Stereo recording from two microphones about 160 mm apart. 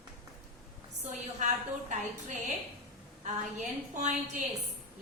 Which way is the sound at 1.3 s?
50° right (ahead or behind).